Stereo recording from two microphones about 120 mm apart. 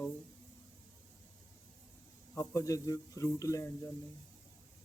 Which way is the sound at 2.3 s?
20° left (ahead or behind).